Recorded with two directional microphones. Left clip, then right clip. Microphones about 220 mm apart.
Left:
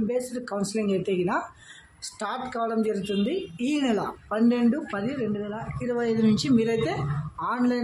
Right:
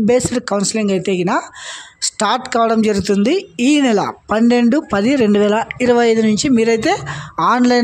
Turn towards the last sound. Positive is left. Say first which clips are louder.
# right 13 dB
turn(degrees=-45)  # may be behind; listen again after turning